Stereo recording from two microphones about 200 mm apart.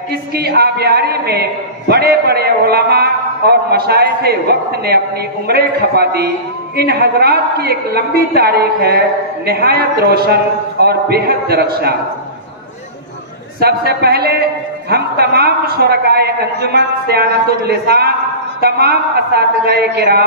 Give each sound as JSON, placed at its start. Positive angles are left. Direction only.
{"t": 0.1, "sound": "a man's voice", "side_deg": -50}
{"t": 13.6, "sound": "a man's voice", "side_deg": -50}